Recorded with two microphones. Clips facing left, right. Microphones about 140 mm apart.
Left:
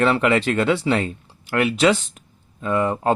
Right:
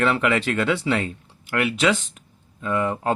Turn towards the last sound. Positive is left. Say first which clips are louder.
# left 3 dB
turn(degrees=35)  # may be behind; listen again after turning